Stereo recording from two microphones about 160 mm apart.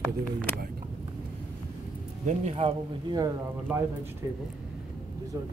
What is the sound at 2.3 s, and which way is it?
Speech, 45° right (ahead or behind).